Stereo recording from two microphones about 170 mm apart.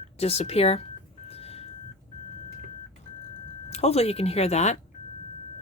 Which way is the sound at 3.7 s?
35° left (ahead or behind).